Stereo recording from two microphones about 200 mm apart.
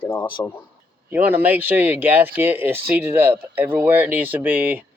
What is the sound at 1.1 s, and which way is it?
Speech, 10° right (ahead or behind).